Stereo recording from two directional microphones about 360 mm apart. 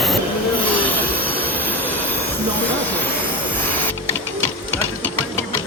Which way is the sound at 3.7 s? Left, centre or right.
Centre.